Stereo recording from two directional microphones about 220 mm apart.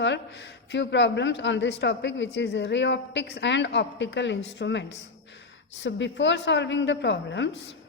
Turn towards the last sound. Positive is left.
turn(degrees=55)  # may be behind; listen again after turning